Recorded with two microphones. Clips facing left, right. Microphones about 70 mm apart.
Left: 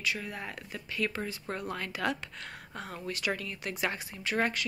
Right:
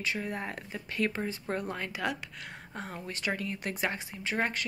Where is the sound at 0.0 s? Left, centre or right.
Right.